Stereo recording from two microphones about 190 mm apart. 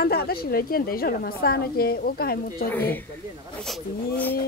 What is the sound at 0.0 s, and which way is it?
A woman's voice, 55° left (ahead or behind).